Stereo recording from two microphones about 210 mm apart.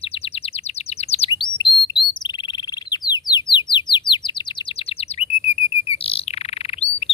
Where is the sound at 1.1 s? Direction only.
25° left (ahead or behind).